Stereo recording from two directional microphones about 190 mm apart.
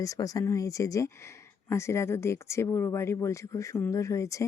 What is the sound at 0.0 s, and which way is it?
Speech, 20° left (ahead or behind).